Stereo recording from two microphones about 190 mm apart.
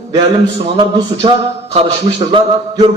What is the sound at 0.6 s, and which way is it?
A man's voice, 25° right (ahead or behind).